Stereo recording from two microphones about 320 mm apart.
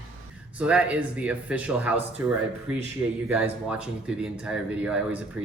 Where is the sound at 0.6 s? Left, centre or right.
Centre.